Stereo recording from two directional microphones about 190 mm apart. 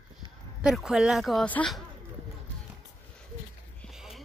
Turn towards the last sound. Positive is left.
turn(degrees=0)  # may be behind; listen again after turning